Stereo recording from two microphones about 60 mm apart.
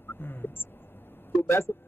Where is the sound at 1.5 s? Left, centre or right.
Left.